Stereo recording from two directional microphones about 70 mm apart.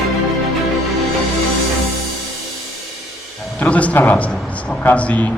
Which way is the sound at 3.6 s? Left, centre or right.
Left.